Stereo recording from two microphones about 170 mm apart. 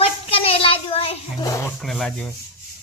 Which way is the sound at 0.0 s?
35° left (ahead or behind).